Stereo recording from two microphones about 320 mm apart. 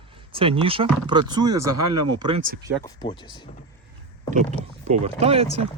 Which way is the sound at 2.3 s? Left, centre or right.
Right.